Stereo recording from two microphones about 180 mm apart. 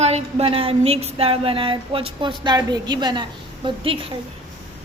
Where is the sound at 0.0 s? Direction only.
35° right (ahead or behind).